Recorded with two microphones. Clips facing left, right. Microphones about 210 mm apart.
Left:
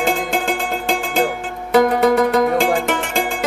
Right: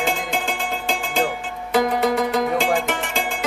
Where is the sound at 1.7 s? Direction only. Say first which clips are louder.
Left 6 dB; 60° left (ahead or behind).